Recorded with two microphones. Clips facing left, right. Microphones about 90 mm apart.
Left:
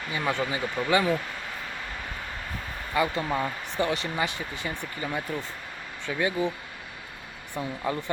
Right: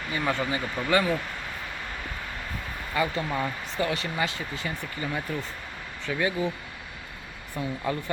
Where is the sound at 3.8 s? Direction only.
20° left (ahead or behind).